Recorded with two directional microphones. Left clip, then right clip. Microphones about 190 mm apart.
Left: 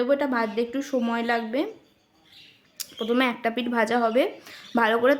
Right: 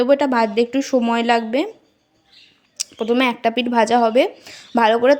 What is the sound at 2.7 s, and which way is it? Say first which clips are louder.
A woman's voice: right 6 dB; 25° right (ahead or behind).